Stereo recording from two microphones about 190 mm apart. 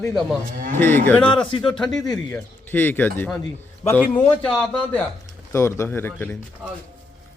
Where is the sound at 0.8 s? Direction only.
10° left (ahead or behind).